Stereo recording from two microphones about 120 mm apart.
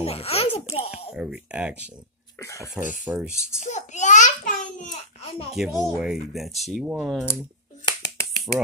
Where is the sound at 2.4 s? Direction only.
25° left (ahead or behind).